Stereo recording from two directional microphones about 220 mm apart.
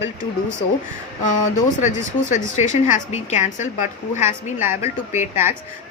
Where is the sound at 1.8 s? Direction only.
35° left (ahead or behind).